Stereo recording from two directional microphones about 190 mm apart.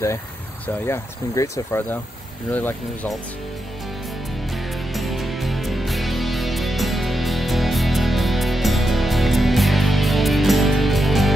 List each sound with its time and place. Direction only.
0.8 s speech: 15° left (ahead or behind)
4.9 s music: centre (ahead or behind)